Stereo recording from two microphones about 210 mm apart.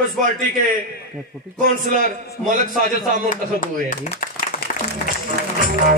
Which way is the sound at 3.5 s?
35° left (ahead or behind).